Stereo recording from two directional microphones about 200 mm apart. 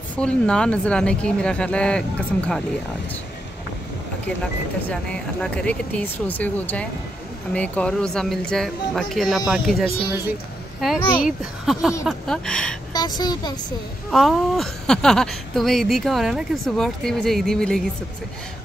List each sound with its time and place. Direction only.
0.1 s speech: 5° left (ahead or behind)
4.4 s speech: 5° left (ahead or behind)
11.1 s speech: 5° right (ahead or behind)
12.9 s a woman's voice: 20° left (ahead or behind)
14.1 s speech: centre (ahead or behind)